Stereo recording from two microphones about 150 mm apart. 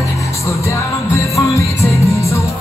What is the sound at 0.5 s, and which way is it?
Music, 20° left (ahead or behind).